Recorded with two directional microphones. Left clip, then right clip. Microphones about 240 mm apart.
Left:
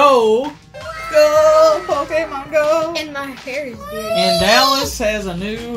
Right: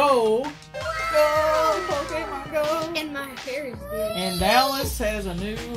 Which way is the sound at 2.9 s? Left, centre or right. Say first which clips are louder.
Left 6 dB; right.